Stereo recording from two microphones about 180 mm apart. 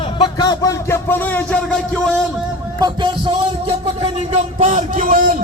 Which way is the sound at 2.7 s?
25° right (ahead or behind).